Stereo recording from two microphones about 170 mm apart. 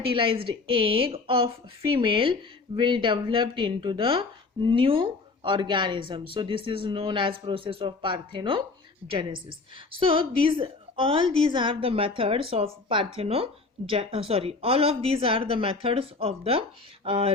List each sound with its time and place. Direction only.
0.0 s a woman's voice: 30° right (ahead or behind)